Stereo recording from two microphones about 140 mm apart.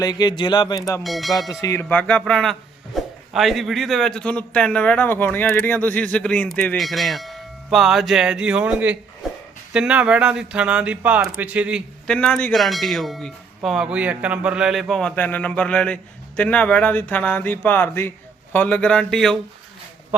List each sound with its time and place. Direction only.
0.0 s speech: 30° left (ahead or behind)
1.0 s speech: centre (ahead or behind)
1.6 s speech: 15° left (ahead or behind); by 9.0 s 10° right (ahead or behind)
9.2 s a sound: centre (ahead or behind)
9.7 s speech: 5° right (ahead or behind)
12.0 s speech: 5° left (ahead or behind)